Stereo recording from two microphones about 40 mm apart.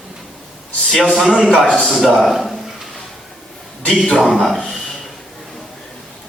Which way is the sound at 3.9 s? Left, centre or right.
Centre.